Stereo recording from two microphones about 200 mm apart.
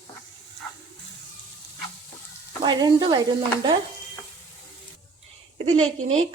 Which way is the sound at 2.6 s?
20° right (ahead or behind).